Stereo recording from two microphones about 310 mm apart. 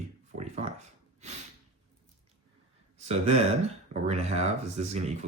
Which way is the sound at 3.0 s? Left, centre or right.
Right.